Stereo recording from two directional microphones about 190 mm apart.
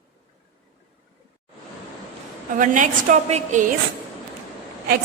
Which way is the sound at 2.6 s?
40° right (ahead or behind).